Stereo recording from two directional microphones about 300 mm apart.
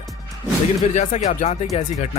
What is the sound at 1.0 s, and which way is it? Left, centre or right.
Speech, left.